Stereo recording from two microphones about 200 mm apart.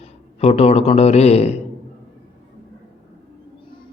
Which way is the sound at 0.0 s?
30° left (ahead or behind).